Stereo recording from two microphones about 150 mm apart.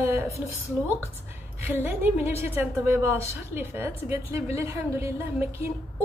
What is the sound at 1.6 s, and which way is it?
A woman's voice, 15° right (ahead or behind).